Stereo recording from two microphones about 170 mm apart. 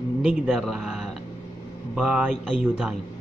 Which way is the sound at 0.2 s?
5° right (ahead or behind).